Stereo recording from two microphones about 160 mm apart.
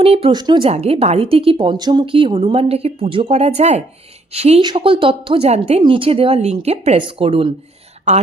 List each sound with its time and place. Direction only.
0.0 s speech: 35° right (ahead or behind)
8.1 s a woman's voice: 45° right (ahead or behind)